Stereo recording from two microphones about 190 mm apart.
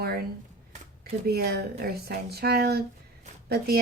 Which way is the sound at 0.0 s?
55° right (ahead or behind).